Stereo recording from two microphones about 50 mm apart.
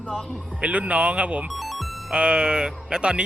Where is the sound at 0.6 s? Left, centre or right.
Right.